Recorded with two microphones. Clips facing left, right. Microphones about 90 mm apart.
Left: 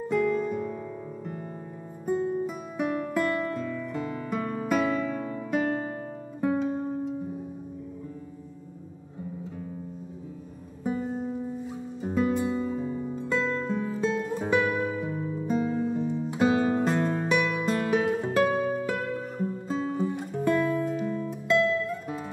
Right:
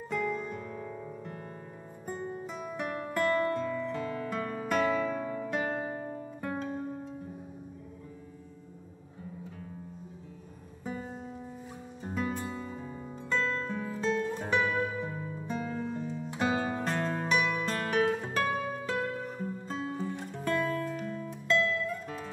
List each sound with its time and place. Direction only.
0.1 s music: centre (ahead or behind)
5.7 s music: 10° right (ahead or behind)
6.4 s music: 10° left (ahead or behind)
10.8 s music: 15° left (ahead or behind)